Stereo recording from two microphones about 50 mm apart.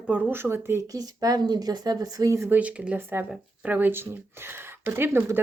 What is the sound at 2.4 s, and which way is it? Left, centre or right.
Speech, right.